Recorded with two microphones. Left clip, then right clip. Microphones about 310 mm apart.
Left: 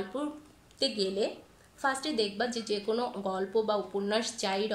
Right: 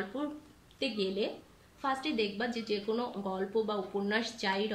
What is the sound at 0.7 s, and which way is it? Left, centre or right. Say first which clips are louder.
A woman's voice: left 3 dB; centre.